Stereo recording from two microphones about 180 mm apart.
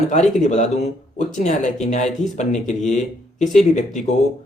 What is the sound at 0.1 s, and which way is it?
Speech, 40° left (ahead or behind).